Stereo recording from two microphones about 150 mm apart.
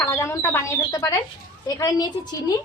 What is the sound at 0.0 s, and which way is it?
Speech, 20° left (ahead or behind).